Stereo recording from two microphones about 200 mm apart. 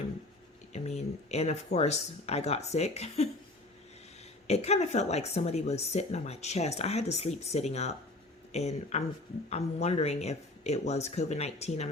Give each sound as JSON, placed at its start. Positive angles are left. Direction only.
{"t": 0.7, "sound": "speech", "side_deg": 35}
{"t": 4.4, "sound": "speech", "side_deg": 30}